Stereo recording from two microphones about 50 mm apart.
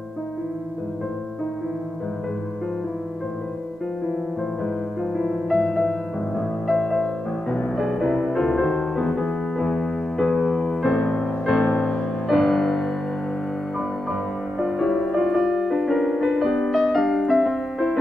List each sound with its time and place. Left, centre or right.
5.1 s music: centre
11.0 s music: centre
11.6 s music: left
12.3 s music: centre
14.6 s music: centre